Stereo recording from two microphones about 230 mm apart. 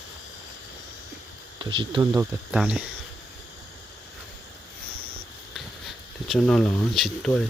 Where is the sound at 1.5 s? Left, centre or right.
Centre.